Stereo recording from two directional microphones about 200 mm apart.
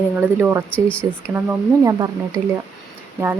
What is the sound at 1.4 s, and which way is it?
Speech, 15° right (ahead or behind).